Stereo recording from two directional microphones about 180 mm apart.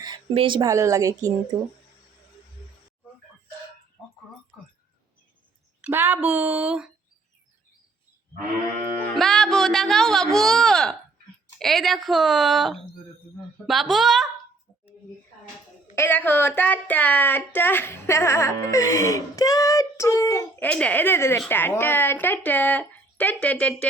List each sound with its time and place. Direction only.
0.0 s speech: 25° right (ahead or behind)
5.8 s speech: 10° right (ahead or behind)
8.7 s music: 45° right (ahead or behind)
9.1 s a woman's voice: centre (ahead or behind)
16.0 s speech: 10° left (ahead or behind)